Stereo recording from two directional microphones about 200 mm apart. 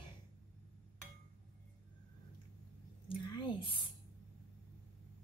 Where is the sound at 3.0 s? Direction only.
25° left (ahead or behind).